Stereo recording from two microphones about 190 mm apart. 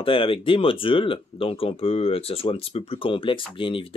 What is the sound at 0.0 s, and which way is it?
Speech, 30° left (ahead or behind).